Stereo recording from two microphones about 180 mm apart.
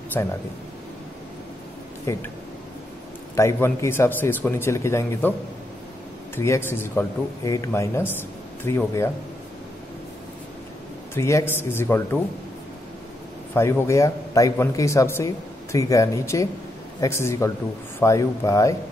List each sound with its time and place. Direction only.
0.2 s a man's voice: 15° left (ahead or behind)
2.1 s a man's voice: 15° left (ahead or behind)
3.3 s a man's voice: 15° left (ahead or behind)
6.3 s a man's voice: 15° left (ahead or behind)
11.1 s a man's voice: 15° left (ahead or behind)
13.6 s a man's voice: 15° left (ahead or behind)